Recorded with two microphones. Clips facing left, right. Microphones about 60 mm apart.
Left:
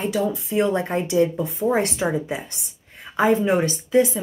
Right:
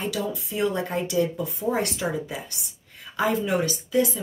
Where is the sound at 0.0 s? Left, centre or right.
Left.